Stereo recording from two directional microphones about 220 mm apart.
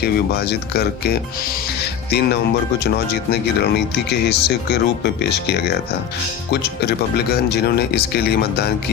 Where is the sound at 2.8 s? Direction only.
45° left (ahead or behind).